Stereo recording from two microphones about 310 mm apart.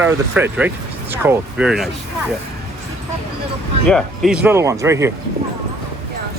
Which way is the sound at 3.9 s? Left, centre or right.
Centre.